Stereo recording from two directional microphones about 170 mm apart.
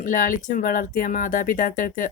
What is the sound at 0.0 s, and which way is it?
Speech, 50° left (ahead or behind).